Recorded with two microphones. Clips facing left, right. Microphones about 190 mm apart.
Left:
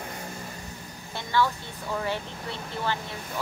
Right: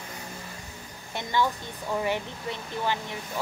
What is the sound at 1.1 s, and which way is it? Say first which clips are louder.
Speech: left 1 dB; 15° right (ahead or behind).